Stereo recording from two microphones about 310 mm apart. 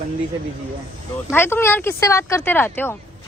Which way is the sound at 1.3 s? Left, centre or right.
Centre.